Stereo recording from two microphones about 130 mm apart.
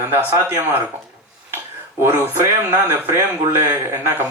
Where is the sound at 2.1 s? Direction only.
20° right (ahead or behind).